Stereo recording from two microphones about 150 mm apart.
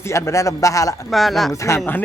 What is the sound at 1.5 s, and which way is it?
Speech, 20° left (ahead or behind).